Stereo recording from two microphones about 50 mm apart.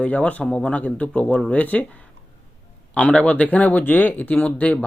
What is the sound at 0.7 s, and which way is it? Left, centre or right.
Speech, left.